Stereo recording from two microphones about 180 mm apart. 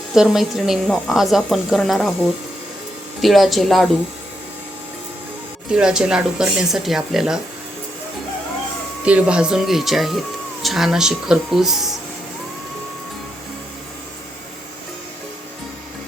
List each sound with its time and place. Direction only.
0.1 s speech: centre (ahead or behind)
3.2 s speech: centre (ahead or behind)
5.7 s speech: 5° right (ahead or behind)
9.0 s speech: 5° right (ahead or behind)